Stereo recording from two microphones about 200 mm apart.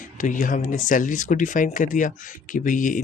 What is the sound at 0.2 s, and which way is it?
Speech, 40° left (ahead or behind).